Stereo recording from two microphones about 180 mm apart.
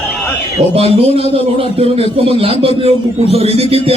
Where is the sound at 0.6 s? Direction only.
35° right (ahead or behind).